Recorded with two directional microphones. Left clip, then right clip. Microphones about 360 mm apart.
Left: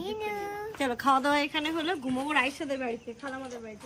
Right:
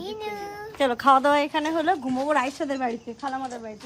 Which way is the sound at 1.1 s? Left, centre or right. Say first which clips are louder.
Right 6 dB; centre.